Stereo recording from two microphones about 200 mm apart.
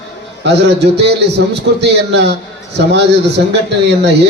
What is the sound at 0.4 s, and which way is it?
A man's voice, 55° right (ahead or behind).